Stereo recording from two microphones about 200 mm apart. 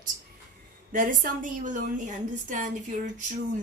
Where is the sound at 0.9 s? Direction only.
40° right (ahead or behind).